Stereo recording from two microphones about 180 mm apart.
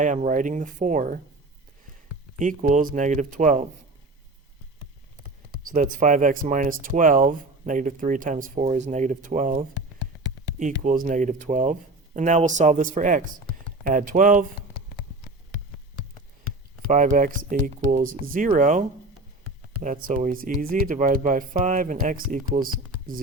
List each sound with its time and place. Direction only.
0.0 s speech: 45° right (ahead or behind)
2.4 s speech: 45° right (ahead or behind)
5.2 s speech: 50° right (ahead or behind)
10.8 s speech: 45° right (ahead or behind)
16.4 s speech: 50° right (ahead or behind)